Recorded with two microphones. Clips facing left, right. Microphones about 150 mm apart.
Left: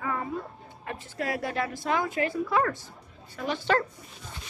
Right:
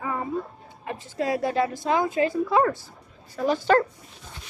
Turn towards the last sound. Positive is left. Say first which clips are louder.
# right 6 dB
turn(degrees=-40)  # may be behind; listen again after turning